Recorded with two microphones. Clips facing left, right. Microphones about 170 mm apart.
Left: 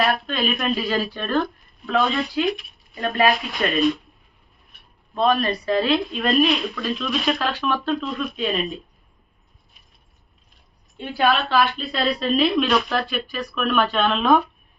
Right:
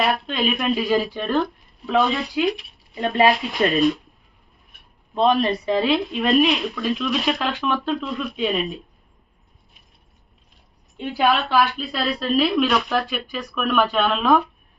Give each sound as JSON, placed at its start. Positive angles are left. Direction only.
{"t": 0.0, "sound": "a woman's voice", "side_deg": -15}
{"t": 5.1, "sound": "a woman's voice", "side_deg": -20}
{"t": 10.9, "sound": "a woman's voice", "side_deg": -15}